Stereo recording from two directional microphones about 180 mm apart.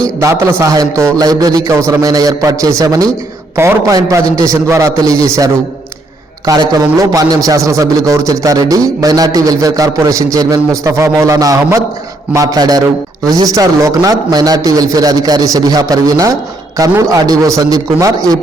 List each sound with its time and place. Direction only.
0.2 s a man's voice: 15° right (ahead or behind)